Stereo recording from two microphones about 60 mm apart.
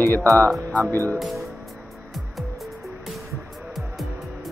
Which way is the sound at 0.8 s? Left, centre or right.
Right.